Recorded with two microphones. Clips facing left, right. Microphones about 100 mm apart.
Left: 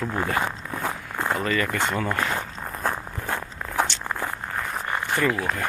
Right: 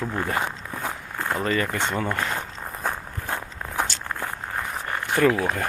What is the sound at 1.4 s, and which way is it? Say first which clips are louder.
Speech: right 3 dB; 30° right (ahead or behind).